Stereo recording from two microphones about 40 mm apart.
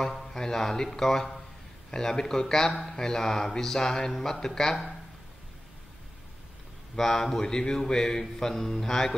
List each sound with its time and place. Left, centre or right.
0.0 s speech: centre
7.0 s speech: centre